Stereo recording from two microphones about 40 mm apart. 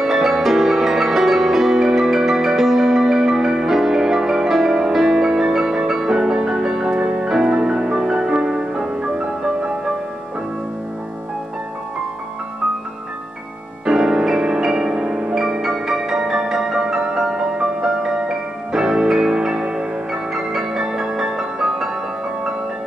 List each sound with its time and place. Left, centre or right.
0.0 s music: centre
13.8 s music: centre